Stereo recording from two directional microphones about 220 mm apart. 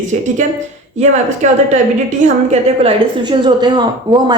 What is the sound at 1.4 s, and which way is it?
A woman's voice, 35° right (ahead or behind).